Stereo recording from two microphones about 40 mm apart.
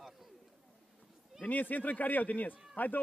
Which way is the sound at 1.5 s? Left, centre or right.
Left.